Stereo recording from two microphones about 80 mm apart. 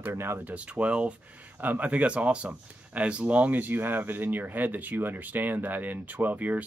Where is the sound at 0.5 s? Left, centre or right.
Centre.